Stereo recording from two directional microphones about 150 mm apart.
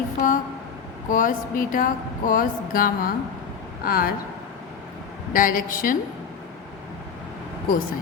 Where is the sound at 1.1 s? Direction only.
60° left (ahead or behind).